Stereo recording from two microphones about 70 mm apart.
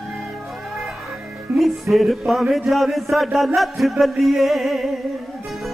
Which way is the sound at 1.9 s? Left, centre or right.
Centre.